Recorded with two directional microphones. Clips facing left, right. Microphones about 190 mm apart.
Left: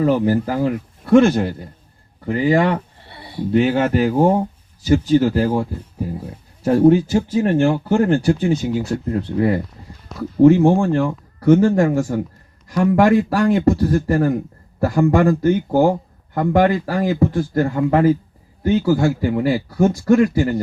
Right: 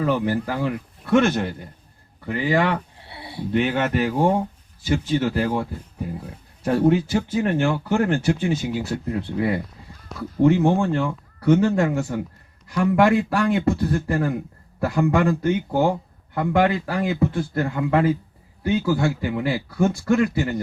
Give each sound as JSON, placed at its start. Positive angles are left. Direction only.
{"t": 0.0, "sound": "speech", "side_deg": 40}
{"t": 3.0, "sound": "a sound", "side_deg": -10}
{"t": 3.5, "sound": "speech", "side_deg": 35}